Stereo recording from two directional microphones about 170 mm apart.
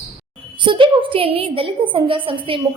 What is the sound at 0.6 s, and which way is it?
A woman's voice, 30° right (ahead or behind).